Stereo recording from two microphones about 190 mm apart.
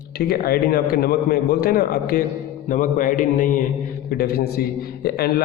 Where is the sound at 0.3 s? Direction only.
55° left (ahead or behind).